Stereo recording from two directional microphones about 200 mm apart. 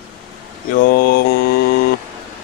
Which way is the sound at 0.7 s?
45° left (ahead or behind).